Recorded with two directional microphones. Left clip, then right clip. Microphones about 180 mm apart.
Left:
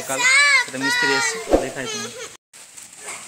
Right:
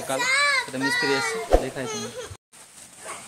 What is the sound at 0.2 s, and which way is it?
Children playing, 10° right (ahead or behind).